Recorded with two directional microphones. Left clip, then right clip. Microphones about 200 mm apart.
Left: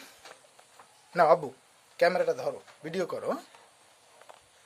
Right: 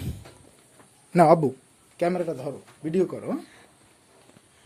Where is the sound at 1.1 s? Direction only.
15° right (ahead or behind).